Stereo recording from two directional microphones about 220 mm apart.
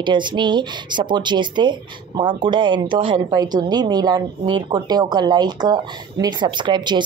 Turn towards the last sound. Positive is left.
turn(degrees=-20)  # may be behind; listen again after turning